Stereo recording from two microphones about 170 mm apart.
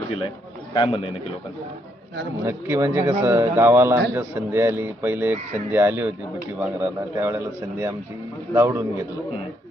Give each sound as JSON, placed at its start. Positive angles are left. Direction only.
{"t": 0.7, "sound": "a man's voice", "side_deg": 30}
{"t": 2.4, "sound": "speech", "side_deg": -15}
{"t": 7.2, "sound": "speech", "side_deg": -15}